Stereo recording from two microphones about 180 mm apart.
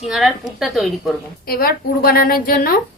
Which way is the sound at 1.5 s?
55° left (ahead or behind).